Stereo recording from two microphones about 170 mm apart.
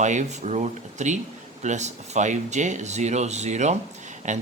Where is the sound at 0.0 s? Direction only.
45° right (ahead or behind).